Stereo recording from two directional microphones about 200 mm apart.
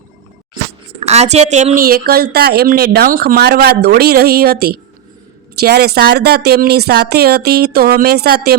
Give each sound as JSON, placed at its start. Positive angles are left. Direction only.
{"t": 0.9, "sound": "a woman's voice", "side_deg": -30}